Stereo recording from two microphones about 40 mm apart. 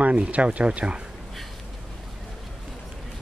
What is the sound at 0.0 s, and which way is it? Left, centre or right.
Speech, right.